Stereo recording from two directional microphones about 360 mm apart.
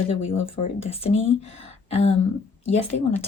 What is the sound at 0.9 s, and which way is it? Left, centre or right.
Speech, centre.